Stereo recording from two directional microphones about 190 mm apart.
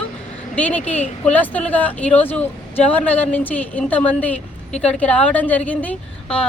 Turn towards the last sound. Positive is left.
turn(degrees=5)  # may be behind; listen again after turning